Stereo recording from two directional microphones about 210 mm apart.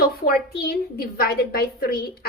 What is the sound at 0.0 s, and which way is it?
A woman's voice, 50° left (ahead or behind).